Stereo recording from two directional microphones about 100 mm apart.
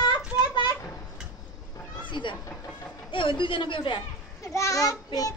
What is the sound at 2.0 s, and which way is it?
Cat, 55° left (ahead or behind).